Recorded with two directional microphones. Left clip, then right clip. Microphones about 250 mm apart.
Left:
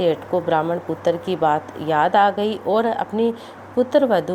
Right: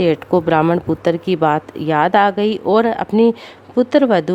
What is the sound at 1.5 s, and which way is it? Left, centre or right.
Speech, right.